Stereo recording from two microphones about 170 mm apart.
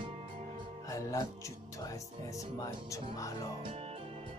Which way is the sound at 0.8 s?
20° left (ahead or behind).